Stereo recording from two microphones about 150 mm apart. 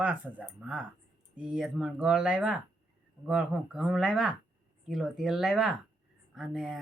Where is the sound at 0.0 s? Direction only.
10° right (ahead or behind).